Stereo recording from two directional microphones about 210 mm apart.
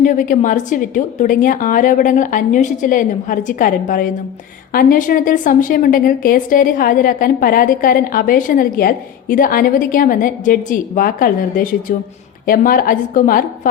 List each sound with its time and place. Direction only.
0.0 s a woman's voice: 40° left (ahead or behind)